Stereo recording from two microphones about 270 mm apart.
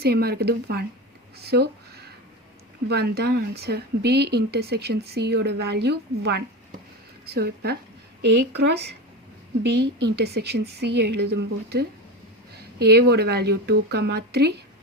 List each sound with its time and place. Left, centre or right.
0.0 s speech: right
1.5 s a sound: right
2.9 s speech: right
8.2 s a woman's voice: right
8.5 s speech: right